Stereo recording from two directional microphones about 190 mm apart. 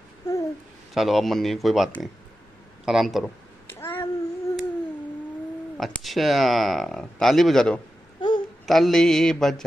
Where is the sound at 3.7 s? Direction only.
10° left (ahead or behind).